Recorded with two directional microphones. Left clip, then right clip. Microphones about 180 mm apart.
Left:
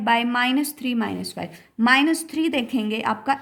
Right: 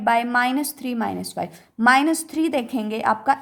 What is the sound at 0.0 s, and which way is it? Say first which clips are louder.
A woman's voice: right 1 dB; 45° right (ahead or behind).